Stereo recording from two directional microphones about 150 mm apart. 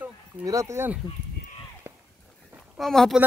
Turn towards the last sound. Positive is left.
turn(degrees=0)  # may be behind; listen again after turning